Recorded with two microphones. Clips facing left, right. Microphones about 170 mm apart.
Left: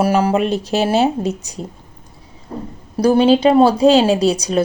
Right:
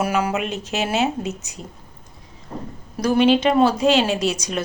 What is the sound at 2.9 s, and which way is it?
Speech, 30° left (ahead or behind).